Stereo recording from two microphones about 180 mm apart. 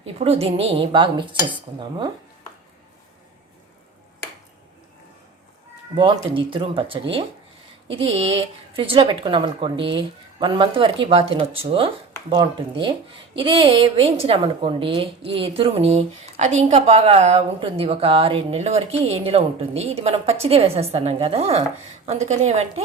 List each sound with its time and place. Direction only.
0.0 s a woman's voice: 35° right (ahead or behind)
5.9 s a woman's voice: 30° right (ahead or behind)
8.0 s a woman's voice: 35° right (ahead or behind)